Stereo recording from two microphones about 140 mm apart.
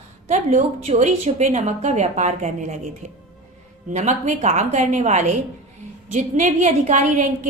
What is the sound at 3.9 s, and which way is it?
A woman's voice, 60° right (ahead or behind).